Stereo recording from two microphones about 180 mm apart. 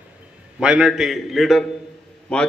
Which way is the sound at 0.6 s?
5° right (ahead or behind).